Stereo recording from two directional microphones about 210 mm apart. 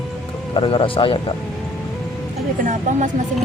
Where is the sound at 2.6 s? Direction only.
35° right (ahead or behind).